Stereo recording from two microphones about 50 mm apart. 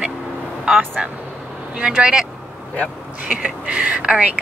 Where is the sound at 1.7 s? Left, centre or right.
Centre.